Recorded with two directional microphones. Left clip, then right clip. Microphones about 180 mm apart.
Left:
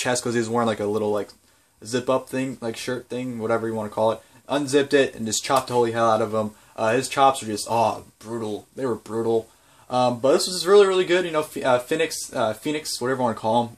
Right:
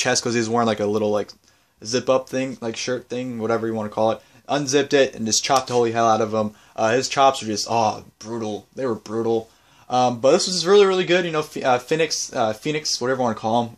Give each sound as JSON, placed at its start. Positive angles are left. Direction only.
{"t": 0.0, "sound": "speech", "side_deg": -35}